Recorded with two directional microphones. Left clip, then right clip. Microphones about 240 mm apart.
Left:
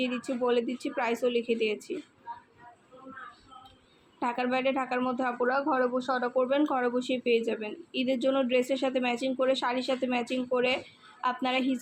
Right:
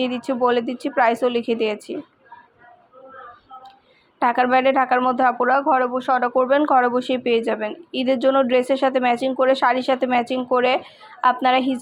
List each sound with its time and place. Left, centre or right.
0.0 s speech: right
4.2 s speech: right